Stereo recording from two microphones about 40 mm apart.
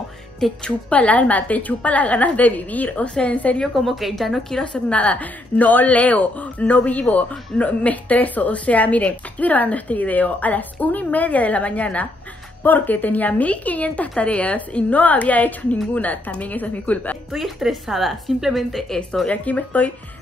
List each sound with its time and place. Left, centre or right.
0.7 s speech: left
3.6 s a woman's voice: centre
4.3 s a woman's voice: centre
4.7 s speech: left
12.6 s speech: left
17.3 s a woman's voice: centre
18.7 s a woman's voice: centre
19.2 s speech: left